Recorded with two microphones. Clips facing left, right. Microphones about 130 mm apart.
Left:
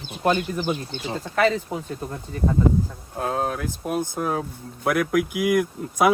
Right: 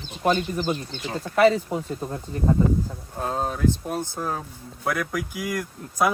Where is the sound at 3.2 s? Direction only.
5° left (ahead or behind).